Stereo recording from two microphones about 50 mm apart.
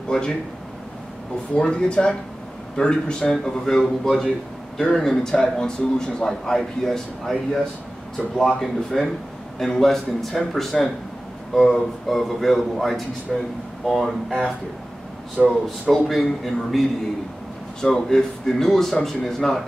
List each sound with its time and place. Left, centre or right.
0.1 s a man's voice: centre
1.6 s a man's voice: centre
8.4 s a man's voice: centre
15.4 s speech: centre
15.9 s a man's voice: centre
17.8 s a man's voice: centre